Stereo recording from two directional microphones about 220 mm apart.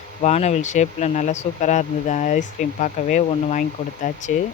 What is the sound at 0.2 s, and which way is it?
Speech, 30° left (ahead or behind).